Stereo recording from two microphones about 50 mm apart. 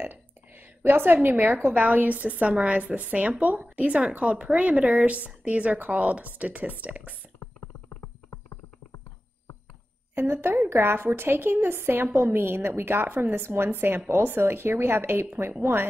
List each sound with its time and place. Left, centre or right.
0.0 s a sound: right
1.8 s a woman's voice: right
10.2 s a woman's voice: right